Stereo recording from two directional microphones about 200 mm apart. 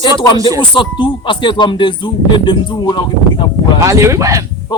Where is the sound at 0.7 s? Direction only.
25° left (ahead or behind).